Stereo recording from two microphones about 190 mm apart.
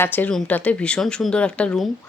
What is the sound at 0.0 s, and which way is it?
Speech, 10° left (ahead or behind).